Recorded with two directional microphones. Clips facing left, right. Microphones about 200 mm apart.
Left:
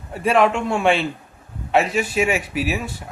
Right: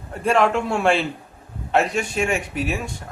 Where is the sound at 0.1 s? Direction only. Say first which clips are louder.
Left 1 dB; centre (ahead or behind).